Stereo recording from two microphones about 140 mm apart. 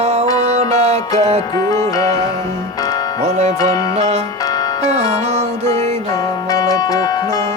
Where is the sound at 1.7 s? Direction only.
25° left (ahead or behind).